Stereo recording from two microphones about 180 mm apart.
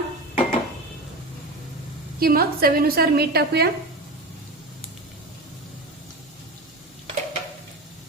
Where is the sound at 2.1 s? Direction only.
55° right (ahead or behind).